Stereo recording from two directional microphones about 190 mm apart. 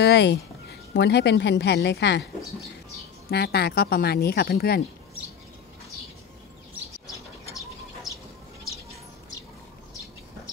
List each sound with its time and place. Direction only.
0.0 s a woman's voice: 65° left (ahead or behind)
3.3 s speech: 60° left (ahead or behind)